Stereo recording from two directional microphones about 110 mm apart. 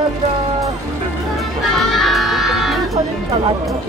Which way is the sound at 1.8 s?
Centre (ahead or behind).